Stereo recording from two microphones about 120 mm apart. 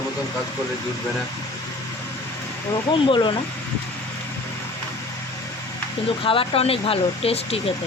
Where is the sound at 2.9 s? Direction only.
40° left (ahead or behind).